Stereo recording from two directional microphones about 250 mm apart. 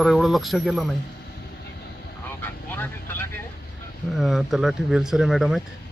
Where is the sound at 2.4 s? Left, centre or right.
Centre.